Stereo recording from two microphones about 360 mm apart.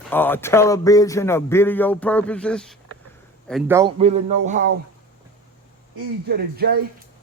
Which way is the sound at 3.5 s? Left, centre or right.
Centre.